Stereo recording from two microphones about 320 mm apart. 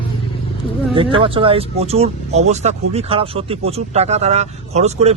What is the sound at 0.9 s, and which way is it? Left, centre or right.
A man's voice, centre.